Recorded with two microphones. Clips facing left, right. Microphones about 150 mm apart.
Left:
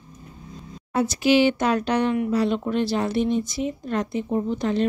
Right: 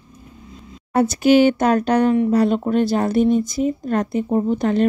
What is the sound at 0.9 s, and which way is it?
Speech, 50° right (ahead or behind).